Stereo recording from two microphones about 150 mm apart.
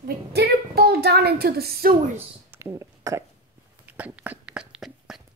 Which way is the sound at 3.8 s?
10° right (ahead or behind).